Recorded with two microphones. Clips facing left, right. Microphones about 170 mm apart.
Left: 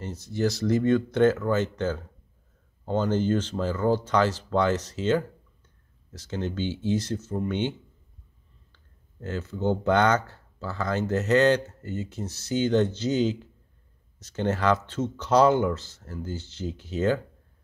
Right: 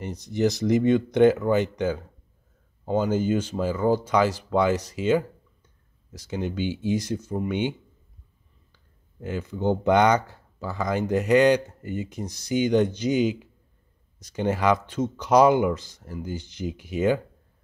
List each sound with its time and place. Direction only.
0.0 s speech: 15° right (ahead or behind)
8.7 s speech: 10° right (ahead or behind)